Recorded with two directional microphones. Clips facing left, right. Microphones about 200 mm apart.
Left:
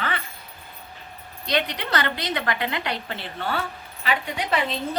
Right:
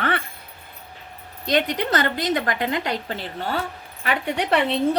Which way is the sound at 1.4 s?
45° right (ahead or behind).